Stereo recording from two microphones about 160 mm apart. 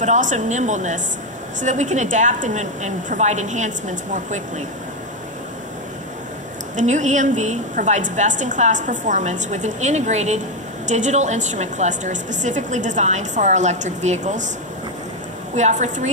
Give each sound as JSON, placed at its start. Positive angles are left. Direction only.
{"t": 0.0, "sound": "a woman's voice", "side_deg": -50}
{"t": 6.8, "sound": "a woman's voice", "side_deg": -50}
{"t": 15.5, "sound": "a woman's voice", "side_deg": -45}